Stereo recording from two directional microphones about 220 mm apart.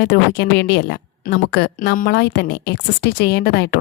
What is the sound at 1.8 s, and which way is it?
Speech, 40° left (ahead or behind).